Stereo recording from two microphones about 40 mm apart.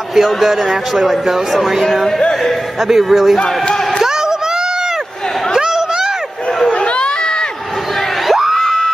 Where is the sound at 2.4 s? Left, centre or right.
Centre.